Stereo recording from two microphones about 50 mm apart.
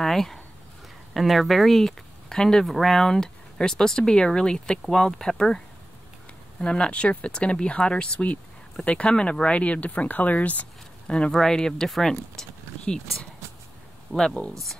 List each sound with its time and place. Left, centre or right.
0.0 s speech: centre
2.6 s speech: centre
6.6 s speech: centre
11.3 s speech: centre
14.5 s speech: centre